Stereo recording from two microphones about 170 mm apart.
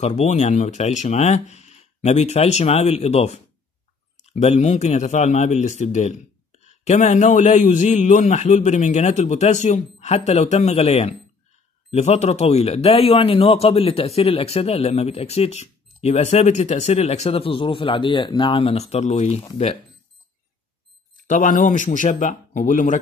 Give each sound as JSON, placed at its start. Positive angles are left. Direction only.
{"t": 0.0, "sound": "speech", "side_deg": 40}
{"t": 21.3, "sound": "speech", "side_deg": 50}